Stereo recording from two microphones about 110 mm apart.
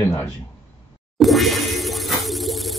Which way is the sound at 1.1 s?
Centre (ahead or behind).